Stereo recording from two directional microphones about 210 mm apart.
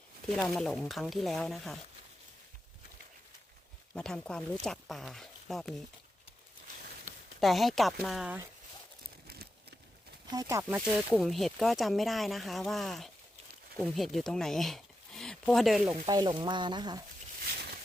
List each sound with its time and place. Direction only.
0.3 s speech: centre (ahead or behind)
3.9 s speech: 5° left (ahead or behind)
7.4 s speech: centre (ahead or behind)
9.2 s a sound: 50° right (ahead or behind)
10.3 s speech: 15° right (ahead or behind)
10.8 s speech: centre (ahead or behind)
15.9 s speech: 15° right (ahead or behind)